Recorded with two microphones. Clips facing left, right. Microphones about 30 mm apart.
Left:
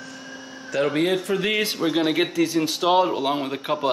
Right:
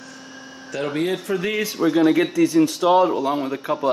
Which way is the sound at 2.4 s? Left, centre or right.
Left.